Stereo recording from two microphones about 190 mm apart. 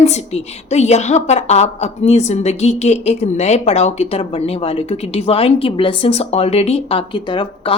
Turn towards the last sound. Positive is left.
turn(degrees=25)  # may be behind; listen again after turning